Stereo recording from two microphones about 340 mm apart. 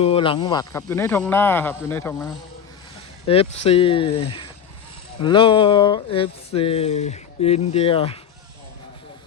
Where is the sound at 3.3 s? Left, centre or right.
Centre.